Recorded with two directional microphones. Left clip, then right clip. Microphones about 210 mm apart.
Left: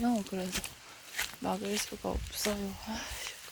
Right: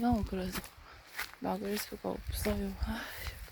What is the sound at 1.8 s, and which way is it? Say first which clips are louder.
Speech: left 2 dB; 10° right (ahead or behind).